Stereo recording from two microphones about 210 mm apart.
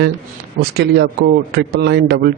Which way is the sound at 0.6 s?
50° right (ahead or behind).